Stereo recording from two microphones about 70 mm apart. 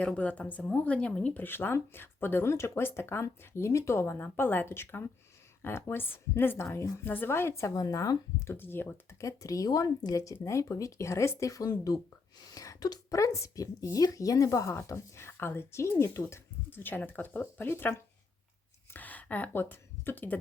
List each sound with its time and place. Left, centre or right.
0.0 s speech: left
7.8 s speech: left
8.4 s speech: left
9.0 s speech: left
18.9 s speech: left